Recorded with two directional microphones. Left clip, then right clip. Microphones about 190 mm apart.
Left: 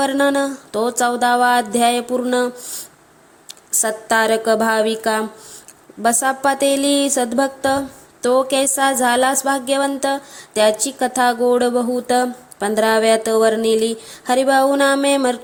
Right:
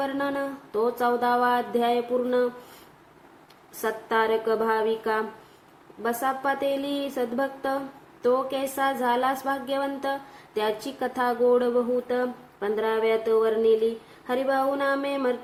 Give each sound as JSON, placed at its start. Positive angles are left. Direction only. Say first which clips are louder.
{"t": 0.0, "sound": "a woman's voice", "louder": "left 11 dB", "side_deg": 45}
{"t": 3.8, "sound": "a woman's voice", "louder": "left 8 dB", "side_deg": 55}